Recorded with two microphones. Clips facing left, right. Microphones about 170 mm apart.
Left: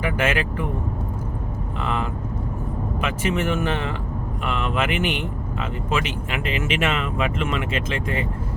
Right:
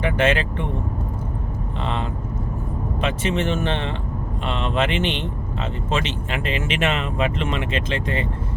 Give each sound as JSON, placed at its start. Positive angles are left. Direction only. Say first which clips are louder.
{"t": 0.0, "sound": "speech", "louder": "right 3 dB", "side_deg": -30}
{"t": 1.8, "sound": "speech", "louder": "left 1 dB", "side_deg": -30}